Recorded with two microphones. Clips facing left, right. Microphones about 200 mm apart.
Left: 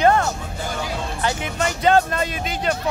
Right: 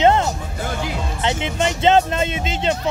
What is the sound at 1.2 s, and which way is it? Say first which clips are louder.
Speech: right 3 dB; 25° right (ahead or behind).